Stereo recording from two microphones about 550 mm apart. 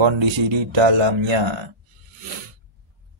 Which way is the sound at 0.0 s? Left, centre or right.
Right.